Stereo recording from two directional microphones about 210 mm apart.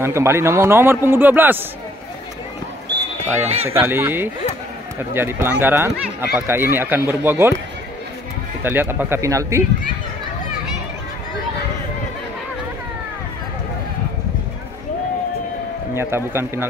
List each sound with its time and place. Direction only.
0.0 s a man's voice: 10° right (ahead or behind)
3.4 s speech: 30° right (ahead or behind)
3.8 s a man's voice: 10° right (ahead or behind)
8.6 s a man's voice: 10° right (ahead or behind)
15.9 s a man's voice: 10° right (ahead or behind)